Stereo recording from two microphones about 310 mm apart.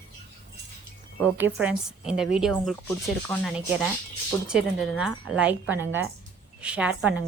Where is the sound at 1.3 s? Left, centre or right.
Centre.